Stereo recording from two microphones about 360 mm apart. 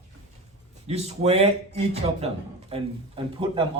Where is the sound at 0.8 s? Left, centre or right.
Centre.